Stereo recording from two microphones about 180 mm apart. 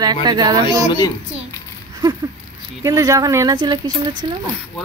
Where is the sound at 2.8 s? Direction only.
20° right (ahead or behind).